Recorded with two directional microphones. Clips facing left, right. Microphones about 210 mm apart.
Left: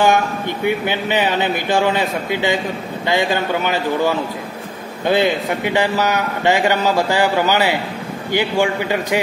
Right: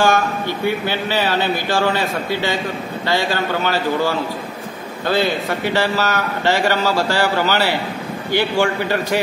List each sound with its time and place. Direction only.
0.7 s a man's voice: 20° left (ahead or behind)